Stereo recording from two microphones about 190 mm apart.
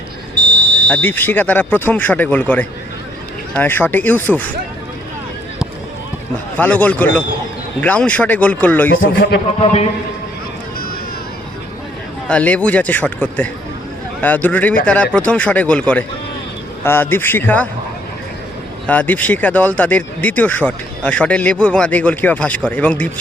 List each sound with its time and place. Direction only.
0.9 s speech: 10° left (ahead or behind)
6.6 s speech: 10° left (ahead or behind)
8.9 s a man's voice: 55° left (ahead or behind)
12.3 s speech: 5° left (ahead or behind)
18.9 s speech: 10° left (ahead or behind)